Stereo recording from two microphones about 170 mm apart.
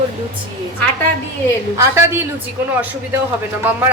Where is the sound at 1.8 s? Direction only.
15° right (ahead or behind).